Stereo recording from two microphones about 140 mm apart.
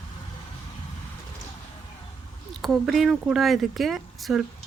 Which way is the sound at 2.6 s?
Centre (ahead or behind).